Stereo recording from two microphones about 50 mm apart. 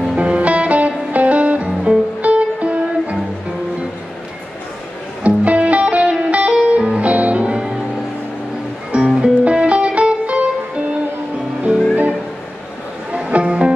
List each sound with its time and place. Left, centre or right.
0.1 s music: right
5.2 s music: right
9.2 s music: right
11.6 s music: right
13.1 s music: right